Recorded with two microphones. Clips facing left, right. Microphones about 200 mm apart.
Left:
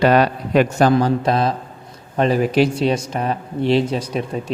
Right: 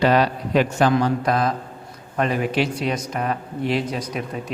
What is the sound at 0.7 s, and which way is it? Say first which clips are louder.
Speech: left 3 dB; 40° left (ahead or behind).